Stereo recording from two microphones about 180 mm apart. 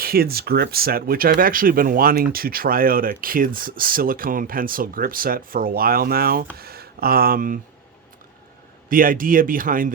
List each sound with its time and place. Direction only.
0.0 s speech: 55° right (ahead or behind)
8.9 s speech: 50° right (ahead or behind)